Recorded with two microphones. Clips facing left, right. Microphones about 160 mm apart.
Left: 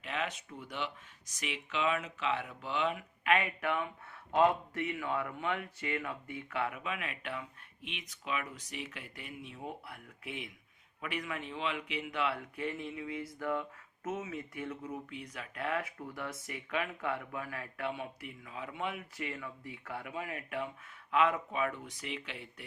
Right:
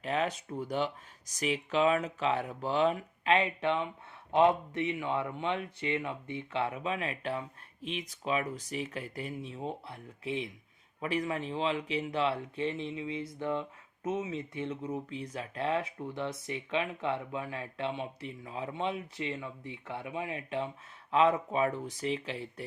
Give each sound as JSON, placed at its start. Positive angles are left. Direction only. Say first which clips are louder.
{"t": 0.0, "sound": "speech", "louder": "right 6 dB", "side_deg": -35}